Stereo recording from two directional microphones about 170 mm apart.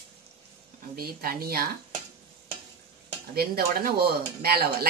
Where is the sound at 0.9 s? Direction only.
65° right (ahead or behind).